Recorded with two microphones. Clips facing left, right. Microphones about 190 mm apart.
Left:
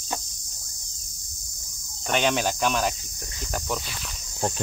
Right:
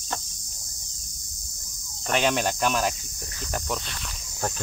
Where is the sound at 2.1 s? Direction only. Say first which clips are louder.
Even; centre (ahead or behind).